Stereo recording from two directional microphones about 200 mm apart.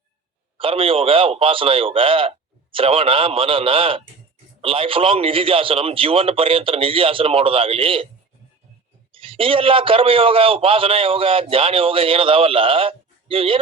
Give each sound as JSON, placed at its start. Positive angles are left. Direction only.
{"t": 0.6, "sound": "a man's voice", "side_deg": -25}
{"t": 9.1, "sound": "a man's voice", "side_deg": -25}